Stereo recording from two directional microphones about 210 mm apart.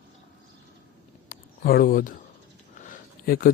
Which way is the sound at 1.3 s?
45° left (ahead or behind).